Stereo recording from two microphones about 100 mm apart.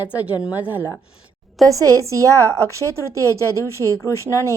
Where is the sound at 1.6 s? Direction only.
35° right (ahead or behind).